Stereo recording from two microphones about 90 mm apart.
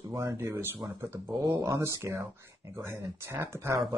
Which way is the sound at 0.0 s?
35° right (ahead or behind).